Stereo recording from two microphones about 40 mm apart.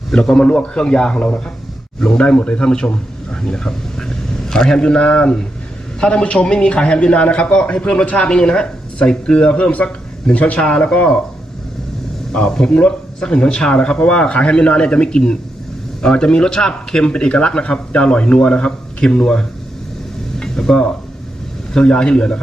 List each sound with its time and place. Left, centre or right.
0.1 s a man's voice: left
12.3 s a man's voice: centre
20.4 s stir: centre
21.8 s a man's voice: left